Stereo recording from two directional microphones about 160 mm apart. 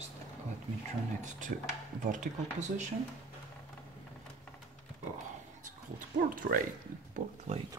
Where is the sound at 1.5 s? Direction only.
65° right (ahead or behind).